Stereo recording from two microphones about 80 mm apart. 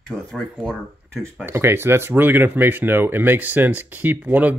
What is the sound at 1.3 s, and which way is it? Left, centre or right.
Speech, right.